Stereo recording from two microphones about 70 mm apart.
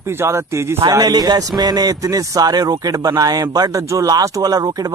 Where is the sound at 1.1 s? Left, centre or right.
Right.